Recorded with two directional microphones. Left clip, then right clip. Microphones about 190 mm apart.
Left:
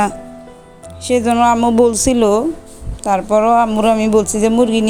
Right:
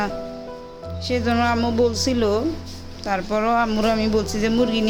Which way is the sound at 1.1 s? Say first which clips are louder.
Left 8 dB; 35° left (ahead or behind).